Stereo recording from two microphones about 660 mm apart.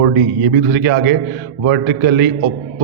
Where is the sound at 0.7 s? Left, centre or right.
Centre.